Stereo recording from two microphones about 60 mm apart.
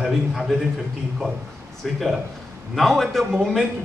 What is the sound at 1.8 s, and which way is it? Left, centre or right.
A man's voice, centre.